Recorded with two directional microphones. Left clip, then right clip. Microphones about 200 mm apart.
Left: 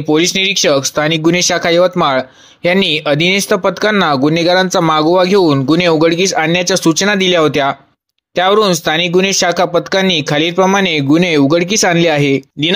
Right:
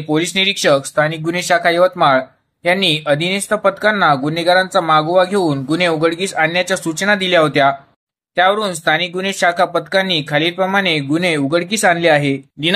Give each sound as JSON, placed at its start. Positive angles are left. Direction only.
{"t": 0.1, "sound": "speech", "side_deg": 35}